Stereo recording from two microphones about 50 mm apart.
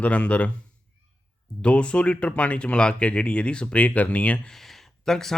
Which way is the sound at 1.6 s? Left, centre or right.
Left.